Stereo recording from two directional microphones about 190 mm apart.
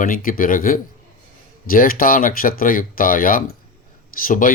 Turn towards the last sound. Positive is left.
turn(degrees=45)  # may be behind; listen again after turning